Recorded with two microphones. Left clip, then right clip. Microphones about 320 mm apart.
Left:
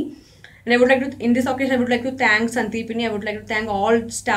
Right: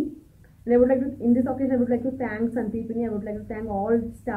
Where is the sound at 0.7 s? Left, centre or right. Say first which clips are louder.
Left 4 dB; centre.